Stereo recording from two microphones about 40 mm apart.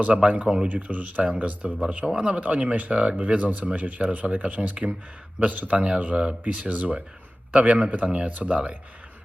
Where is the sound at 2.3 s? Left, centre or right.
Right.